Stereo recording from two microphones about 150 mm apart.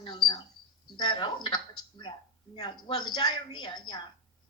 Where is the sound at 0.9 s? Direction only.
30° left (ahead or behind).